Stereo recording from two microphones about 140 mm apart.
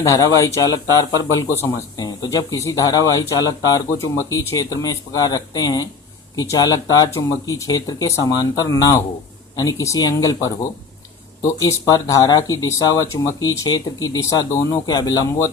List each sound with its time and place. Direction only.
0.0 s a man's voice: 25° left (ahead or behind)